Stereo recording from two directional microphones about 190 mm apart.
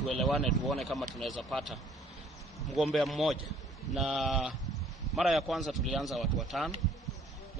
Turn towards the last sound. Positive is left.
turn(degrees=0)  # may be behind; listen again after turning